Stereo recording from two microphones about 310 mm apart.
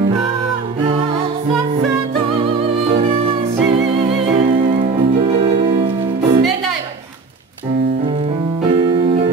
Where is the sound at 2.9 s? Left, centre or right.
Centre.